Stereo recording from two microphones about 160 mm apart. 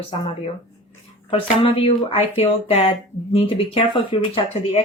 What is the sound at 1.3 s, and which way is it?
Speech, 35° left (ahead or behind).